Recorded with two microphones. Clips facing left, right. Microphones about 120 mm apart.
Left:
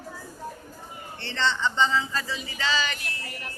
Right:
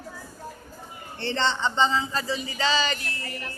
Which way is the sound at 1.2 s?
35° right (ahead or behind).